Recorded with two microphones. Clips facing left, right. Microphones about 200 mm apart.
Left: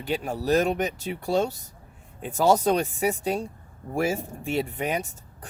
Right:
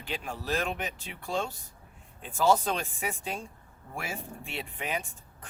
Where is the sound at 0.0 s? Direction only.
40° left (ahead or behind).